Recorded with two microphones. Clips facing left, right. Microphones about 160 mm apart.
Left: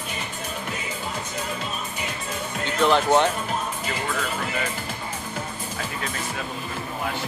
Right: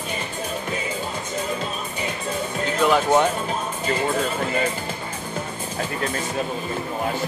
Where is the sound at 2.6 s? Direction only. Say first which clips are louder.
Right 1 dB; 5° right (ahead or behind).